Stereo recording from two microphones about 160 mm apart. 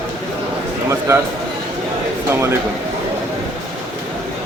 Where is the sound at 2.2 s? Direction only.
15° right (ahead or behind).